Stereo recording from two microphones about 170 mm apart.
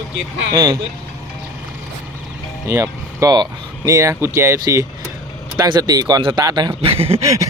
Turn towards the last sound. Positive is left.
turn(degrees=-20)  # may be behind; listen again after turning